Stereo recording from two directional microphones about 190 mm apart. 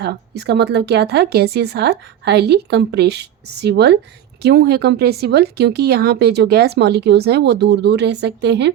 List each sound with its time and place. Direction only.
0.0 s a woman's voice: 60° right (ahead or behind)